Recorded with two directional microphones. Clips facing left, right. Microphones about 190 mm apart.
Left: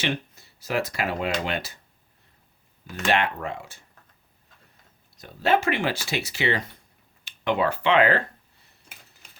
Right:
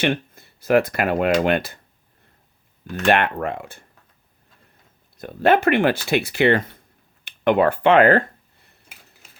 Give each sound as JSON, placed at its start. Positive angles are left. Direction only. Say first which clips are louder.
{"t": 0.0, "sound": "speech", "louder": "right 7 dB", "side_deg": -55}
{"t": 3.1, "sound": "speech", "louder": "right 5 dB", "side_deg": -55}
{"t": 5.1, "sound": "speech", "louder": "right 5 dB", "side_deg": -55}